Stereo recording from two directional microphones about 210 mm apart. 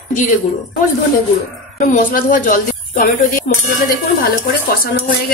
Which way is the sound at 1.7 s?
40° left (ahead or behind).